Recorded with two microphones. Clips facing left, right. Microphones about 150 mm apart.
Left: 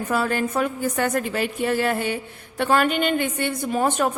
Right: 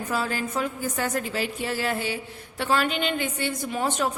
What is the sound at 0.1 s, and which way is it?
A woman's voice, 60° left (ahead or behind).